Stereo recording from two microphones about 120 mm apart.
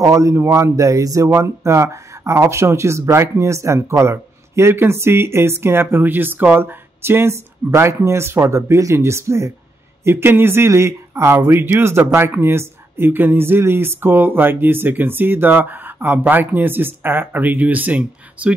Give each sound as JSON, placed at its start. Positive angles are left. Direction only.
{"t": 0.0, "sound": "speech", "side_deg": -25}